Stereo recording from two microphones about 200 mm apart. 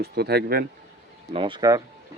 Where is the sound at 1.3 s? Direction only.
25° right (ahead or behind).